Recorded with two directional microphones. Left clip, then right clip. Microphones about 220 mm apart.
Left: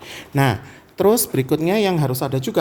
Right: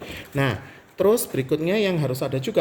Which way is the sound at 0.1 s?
50° left (ahead or behind).